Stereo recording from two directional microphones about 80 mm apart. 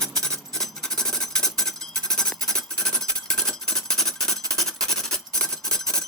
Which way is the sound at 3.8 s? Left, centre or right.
Centre.